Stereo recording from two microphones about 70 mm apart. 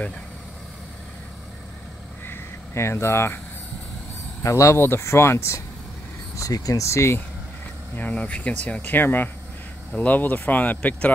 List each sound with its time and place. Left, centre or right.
2.2 s a sound: left
4.4 s speech: left
6.3 s speech: left
6.8 s speech: left
7.9 s speech: left